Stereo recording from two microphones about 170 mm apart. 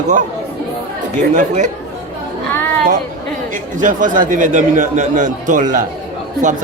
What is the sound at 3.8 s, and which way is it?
A man's voice, 50° right (ahead or behind).